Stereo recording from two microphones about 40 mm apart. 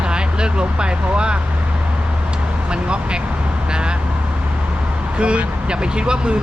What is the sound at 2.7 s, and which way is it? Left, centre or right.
Speech, right.